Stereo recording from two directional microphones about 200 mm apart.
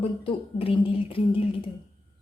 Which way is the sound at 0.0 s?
25° left (ahead or behind).